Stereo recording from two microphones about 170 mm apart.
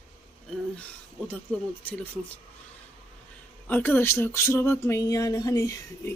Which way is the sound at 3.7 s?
10° left (ahead or behind).